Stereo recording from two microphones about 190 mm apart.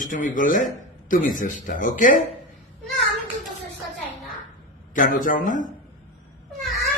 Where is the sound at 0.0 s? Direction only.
45° left (ahead or behind).